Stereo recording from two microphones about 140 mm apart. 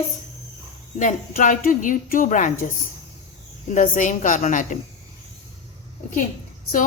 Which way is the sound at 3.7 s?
65° left (ahead or behind).